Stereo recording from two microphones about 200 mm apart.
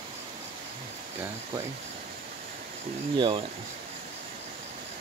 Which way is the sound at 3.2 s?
25° right (ahead or behind).